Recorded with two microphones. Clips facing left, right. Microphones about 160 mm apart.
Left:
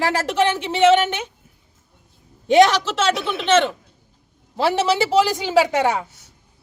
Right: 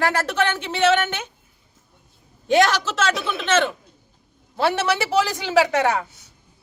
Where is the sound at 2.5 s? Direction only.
25° left (ahead or behind).